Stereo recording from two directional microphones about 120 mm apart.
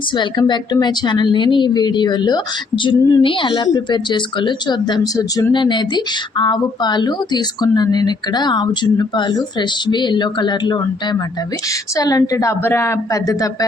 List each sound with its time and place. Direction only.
0.2 s a woman's voice: 40° left (ahead or behind)